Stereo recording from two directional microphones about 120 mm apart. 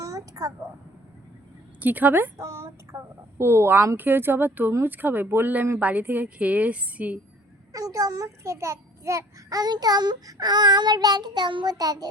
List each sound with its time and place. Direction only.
0.0 s a sound: 25° right (ahead or behind)
1.8 s a woman's voice: 15° right (ahead or behind)
7.7 s a child's voice: 30° right (ahead or behind)